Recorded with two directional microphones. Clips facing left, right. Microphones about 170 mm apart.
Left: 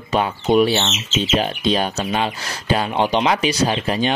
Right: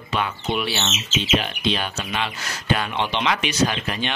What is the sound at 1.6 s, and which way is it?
Speech, 40° left (ahead or behind).